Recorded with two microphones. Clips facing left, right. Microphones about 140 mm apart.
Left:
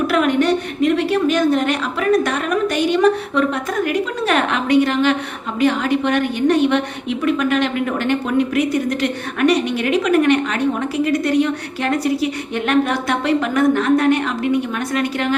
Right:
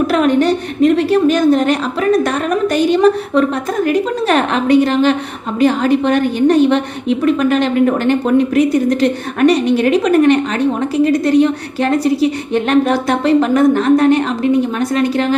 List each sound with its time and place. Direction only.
0.1 s a woman's voice: 35° right (ahead or behind)